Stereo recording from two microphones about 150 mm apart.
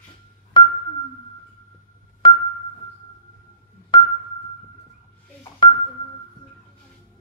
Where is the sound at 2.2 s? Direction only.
30° left (ahead or behind).